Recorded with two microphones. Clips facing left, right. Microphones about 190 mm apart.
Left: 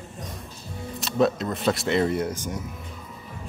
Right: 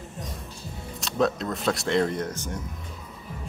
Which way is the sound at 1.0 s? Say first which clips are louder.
Left 2 dB; centre (ahead or behind).